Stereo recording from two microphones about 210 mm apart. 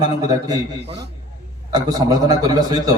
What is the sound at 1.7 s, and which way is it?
A man's voice, 20° right (ahead or behind).